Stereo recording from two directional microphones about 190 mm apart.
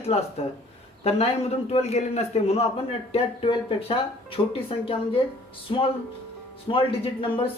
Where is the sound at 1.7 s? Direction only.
35° left (ahead or behind).